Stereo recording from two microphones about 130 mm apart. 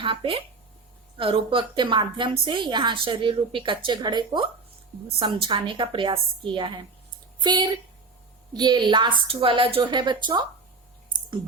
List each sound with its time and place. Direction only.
0.0 s a woman's voice: 45° right (ahead or behind)